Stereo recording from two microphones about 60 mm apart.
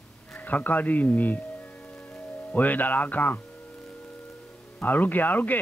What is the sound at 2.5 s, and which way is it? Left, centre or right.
Speech, left.